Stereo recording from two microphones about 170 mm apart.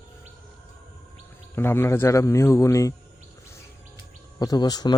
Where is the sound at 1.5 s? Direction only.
15° left (ahead or behind).